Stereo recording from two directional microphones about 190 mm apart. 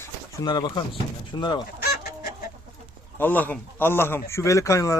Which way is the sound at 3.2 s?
10° left (ahead or behind).